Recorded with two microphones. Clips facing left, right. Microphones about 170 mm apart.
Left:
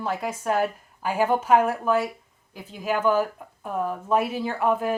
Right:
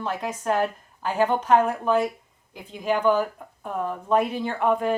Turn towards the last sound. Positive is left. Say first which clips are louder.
# right 1 dB
turn(degrees=5)  # may be behind; listen again after turning